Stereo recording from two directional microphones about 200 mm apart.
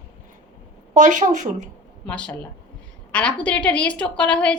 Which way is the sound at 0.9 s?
40° right (ahead or behind).